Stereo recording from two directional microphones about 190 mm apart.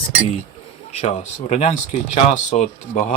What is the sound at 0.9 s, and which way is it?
Speech, 35° left (ahead or behind).